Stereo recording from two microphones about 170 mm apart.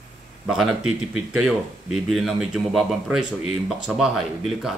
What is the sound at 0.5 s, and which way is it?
Speech, 5° right (ahead or behind).